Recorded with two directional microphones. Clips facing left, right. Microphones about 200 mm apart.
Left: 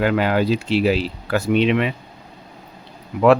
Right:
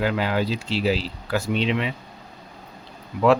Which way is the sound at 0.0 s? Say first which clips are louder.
Left 5 dB; 60° left (ahead or behind).